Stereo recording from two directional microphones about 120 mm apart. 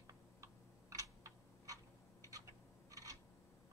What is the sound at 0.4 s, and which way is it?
Typing, 25° right (ahead or behind).